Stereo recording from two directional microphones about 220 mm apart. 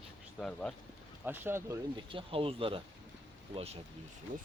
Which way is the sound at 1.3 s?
10° right (ahead or behind).